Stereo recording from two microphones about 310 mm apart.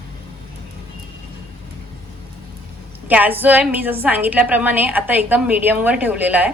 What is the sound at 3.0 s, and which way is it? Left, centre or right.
A woman's voice, centre.